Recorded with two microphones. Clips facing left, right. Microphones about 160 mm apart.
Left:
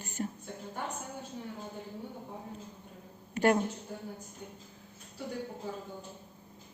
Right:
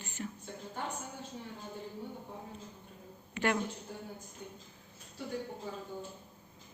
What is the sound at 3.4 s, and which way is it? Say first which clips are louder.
Speech: left 6 dB; 40° left (ahead or behind).